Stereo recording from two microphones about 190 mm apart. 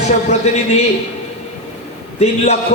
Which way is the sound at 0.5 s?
35° left (ahead or behind).